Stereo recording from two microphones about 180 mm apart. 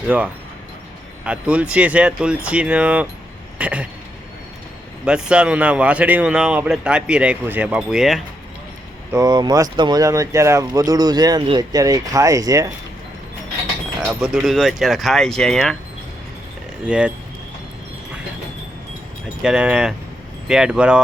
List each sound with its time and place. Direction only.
0.1 s speech: 10° right (ahead or behind)
5.0 s a man's voice: 5° right (ahead or behind)
9.1 s speech: 20° right (ahead or behind)
14.0 s a man's voice: 5° right (ahead or behind)
16.8 s speech: 5° right (ahead or behind)
19.4 s a man's voice: 5° right (ahead or behind)